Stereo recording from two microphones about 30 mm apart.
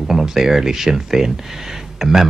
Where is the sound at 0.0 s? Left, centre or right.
Centre.